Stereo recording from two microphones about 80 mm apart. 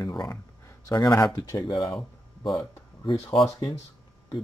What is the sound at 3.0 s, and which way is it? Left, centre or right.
Speech, left.